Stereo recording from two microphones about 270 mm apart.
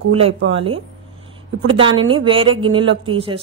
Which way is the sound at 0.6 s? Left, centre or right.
Centre.